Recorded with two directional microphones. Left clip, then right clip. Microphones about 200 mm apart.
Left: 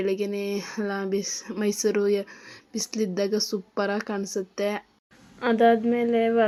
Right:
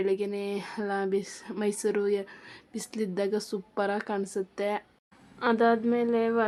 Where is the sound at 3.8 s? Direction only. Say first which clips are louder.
Left 1 dB; 10° left (ahead or behind).